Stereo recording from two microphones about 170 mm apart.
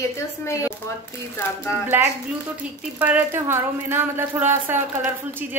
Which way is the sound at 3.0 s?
10° right (ahead or behind).